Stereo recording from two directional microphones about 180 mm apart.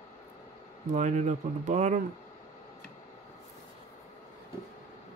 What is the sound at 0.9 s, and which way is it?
Speech, 40° right (ahead or behind).